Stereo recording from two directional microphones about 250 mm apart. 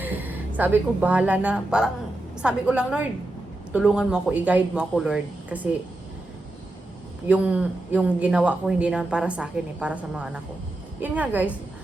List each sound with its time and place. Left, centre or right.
0.0 s a woman's voice: centre
7.3 s a woman's voice: centre